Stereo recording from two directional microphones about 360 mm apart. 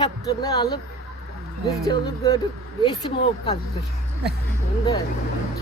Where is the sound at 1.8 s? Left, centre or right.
Centre.